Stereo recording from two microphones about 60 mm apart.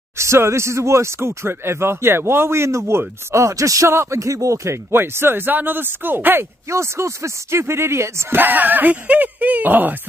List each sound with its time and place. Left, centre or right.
0.2 s speech: right
3.3 s a man's voice: right
3.9 s a man's voice: right
4.9 s speech: right
6.7 s speech: right
8.4 s speech: right